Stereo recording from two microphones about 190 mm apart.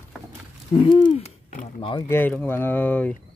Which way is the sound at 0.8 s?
30° left (ahead or behind).